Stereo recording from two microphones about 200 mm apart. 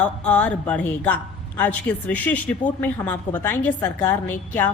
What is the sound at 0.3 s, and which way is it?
A woman's voice, 5° left (ahead or behind).